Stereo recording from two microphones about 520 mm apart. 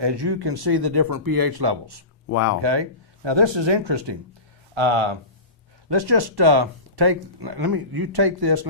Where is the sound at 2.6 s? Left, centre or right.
Right.